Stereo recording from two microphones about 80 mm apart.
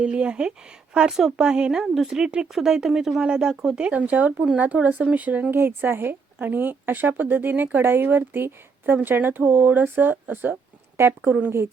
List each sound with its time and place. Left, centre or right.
0.0 s speech: centre
5.5 s a woman's voice: right
11.2 s speech: centre